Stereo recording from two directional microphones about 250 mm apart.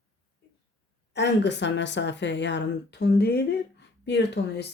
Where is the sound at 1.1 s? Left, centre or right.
Left.